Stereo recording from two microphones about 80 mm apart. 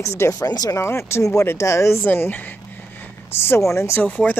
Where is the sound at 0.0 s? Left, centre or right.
Left.